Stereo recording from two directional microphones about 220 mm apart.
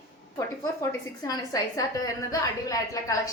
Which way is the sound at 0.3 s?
15° left (ahead or behind).